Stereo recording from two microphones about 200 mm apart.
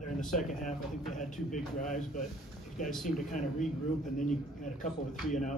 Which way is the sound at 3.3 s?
40° left (ahead or behind).